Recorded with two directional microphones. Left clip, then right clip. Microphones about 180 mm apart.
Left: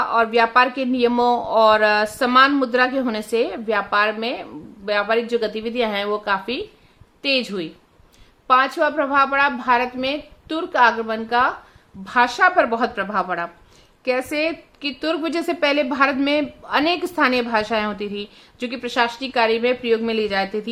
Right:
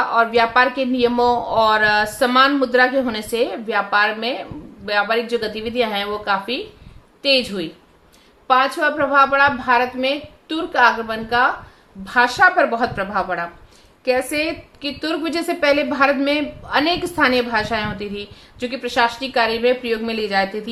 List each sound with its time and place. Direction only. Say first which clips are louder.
0.0 s a woman's voice: right 1 dB; 45° left (ahead or behind)